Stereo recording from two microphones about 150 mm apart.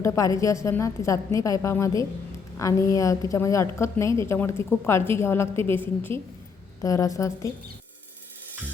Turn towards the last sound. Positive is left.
turn(degrees=20)  # may be behind; listen again after turning